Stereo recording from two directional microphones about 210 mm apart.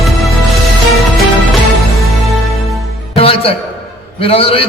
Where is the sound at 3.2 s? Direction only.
25° left (ahead or behind).